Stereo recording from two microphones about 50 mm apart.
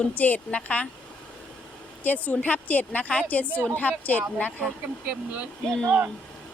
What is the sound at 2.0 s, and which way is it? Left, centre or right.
A woman's voice, left.